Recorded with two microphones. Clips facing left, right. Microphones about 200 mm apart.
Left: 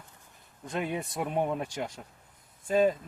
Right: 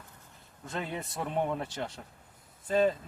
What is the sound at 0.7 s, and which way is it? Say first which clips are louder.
Speech: left 4 dB; 15° left (ahead or behind).